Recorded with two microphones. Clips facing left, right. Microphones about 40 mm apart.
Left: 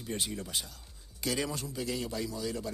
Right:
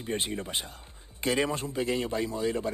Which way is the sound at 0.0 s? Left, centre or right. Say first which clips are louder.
Right 5 dB; right.